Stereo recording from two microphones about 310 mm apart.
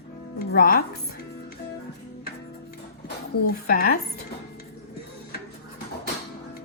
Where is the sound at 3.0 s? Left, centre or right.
Left.